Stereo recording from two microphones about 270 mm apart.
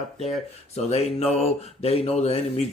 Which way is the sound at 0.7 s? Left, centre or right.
Left.